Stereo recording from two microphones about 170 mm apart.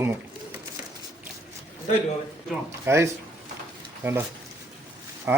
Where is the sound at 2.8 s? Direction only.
15° right (ahead or behind).